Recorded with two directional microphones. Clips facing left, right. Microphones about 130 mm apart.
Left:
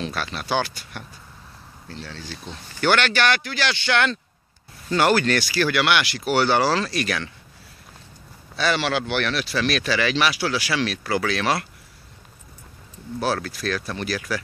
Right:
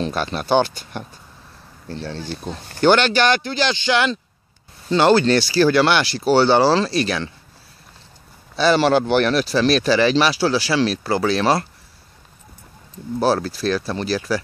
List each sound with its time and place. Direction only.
0.5 s speech: 25° right (ahead or behind)
2.3 s speech: 40° right (ahead or behind)
2.8 s speech: 20° right (ahead or behind)
8.5 s speech: 35° right (ahead or behind)
13.2 s speech: 35° right (ahead or behind)